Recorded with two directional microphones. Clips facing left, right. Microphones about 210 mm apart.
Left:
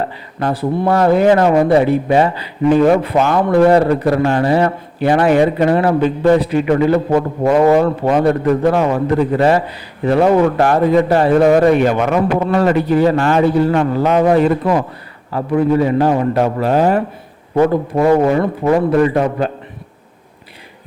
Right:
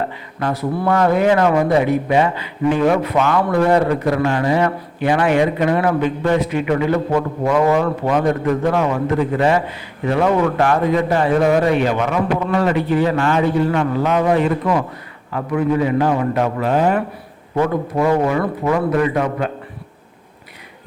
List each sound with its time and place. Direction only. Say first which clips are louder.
0.3 s a man's voice: left 3 dB; 35° left (ahead or behind)